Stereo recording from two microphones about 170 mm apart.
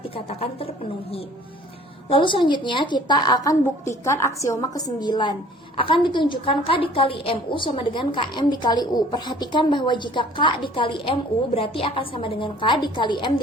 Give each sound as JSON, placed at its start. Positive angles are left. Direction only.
{"t": 0.3, "sound": "a woman's voice", "side_deg": 35}
{"t": 2.0, "sound": "a woman's voice", "side_deg": 30}